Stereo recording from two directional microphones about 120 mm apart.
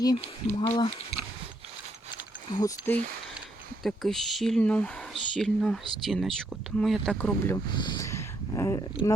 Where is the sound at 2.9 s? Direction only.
15° left (ahead or behind).